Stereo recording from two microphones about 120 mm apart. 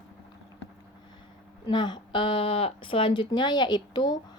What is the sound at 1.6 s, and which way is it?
Speech, 40° left (ahead or behind).